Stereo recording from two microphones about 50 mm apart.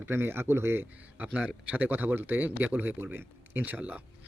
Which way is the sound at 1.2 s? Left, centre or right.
Right.